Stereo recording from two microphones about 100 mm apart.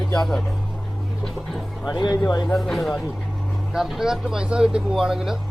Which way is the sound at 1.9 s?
45° left (ahead or behind).